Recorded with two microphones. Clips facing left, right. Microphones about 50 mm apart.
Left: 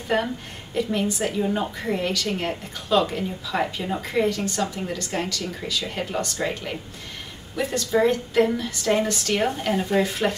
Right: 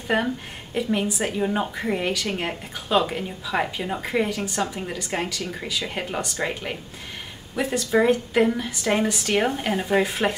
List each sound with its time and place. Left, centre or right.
0.1 s a woman's voice: centre